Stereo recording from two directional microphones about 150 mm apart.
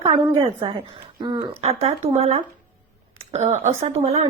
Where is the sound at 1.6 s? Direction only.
45° right (ahead or behind).